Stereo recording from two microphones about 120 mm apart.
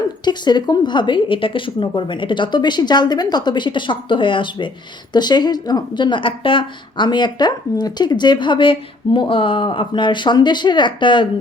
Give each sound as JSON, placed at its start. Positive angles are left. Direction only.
{"t": 0.3, "sound": "a woman's voice", "side_deg": 35}